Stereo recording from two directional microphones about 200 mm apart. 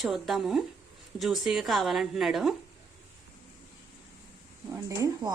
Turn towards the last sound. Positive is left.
turn(degrees=-15)  # may be behind; listen again after turning